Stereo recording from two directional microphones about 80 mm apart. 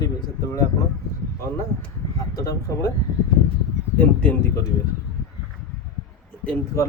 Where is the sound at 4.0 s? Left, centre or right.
Left.